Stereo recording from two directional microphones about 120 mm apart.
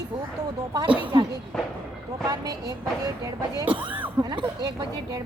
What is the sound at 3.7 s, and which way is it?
Speech, 45° right (ahead or behind).